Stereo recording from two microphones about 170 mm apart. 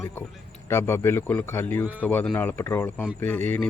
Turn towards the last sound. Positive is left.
turn(degrees=10)  # may be behind; listen again after turning